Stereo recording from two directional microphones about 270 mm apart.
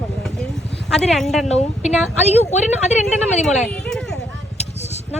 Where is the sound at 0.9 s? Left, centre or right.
Centre.